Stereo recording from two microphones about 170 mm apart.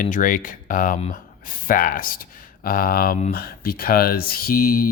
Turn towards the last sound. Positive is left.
turn(degrees=60)  # may be behind; listen again after turning